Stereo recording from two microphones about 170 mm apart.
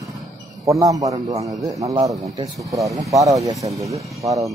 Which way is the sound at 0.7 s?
20° right (ahead or behind).